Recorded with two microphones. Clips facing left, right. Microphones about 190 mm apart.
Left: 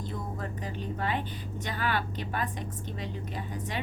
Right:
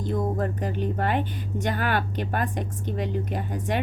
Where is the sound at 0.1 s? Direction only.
55° right (ahead or behind).